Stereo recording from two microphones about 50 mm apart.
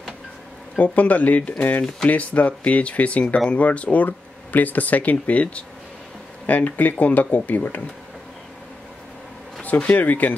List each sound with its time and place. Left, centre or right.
0.7 s speech: left
9.6 s speech: left